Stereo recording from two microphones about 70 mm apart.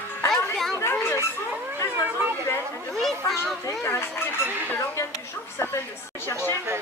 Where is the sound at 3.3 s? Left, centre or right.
Left.